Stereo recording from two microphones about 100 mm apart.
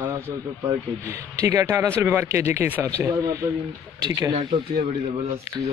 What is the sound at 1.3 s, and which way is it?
Speech, 35° right (ahead or behind).